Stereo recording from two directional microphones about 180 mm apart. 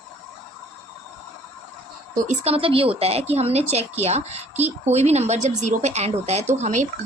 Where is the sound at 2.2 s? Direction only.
40° right (ahead or behind).